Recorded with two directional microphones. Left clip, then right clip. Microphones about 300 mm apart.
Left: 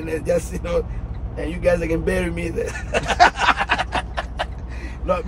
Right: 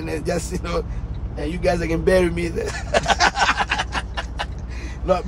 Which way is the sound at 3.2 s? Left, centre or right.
Centre.